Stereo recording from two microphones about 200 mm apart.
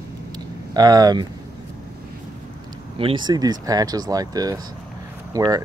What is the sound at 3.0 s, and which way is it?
Speech, 25° right (ahead or behind).